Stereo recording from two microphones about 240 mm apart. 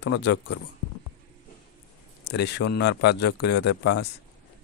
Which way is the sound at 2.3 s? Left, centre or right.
Left.